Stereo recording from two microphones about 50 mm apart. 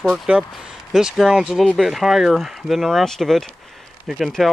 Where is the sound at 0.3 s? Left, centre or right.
Right.